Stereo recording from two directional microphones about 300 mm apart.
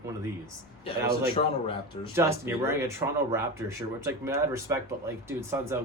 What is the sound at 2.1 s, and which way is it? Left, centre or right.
Speech, centre.